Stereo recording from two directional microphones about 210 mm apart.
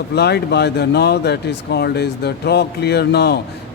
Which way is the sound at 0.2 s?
50° left (ahead or behind).